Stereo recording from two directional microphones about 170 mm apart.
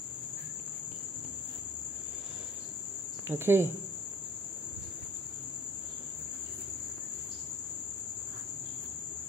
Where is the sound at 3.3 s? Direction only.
15° right (ahead or behind).